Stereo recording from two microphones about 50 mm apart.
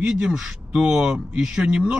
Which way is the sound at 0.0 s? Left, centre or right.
Centre.